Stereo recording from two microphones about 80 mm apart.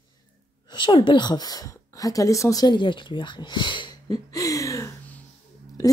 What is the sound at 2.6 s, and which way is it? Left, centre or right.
Speech, left.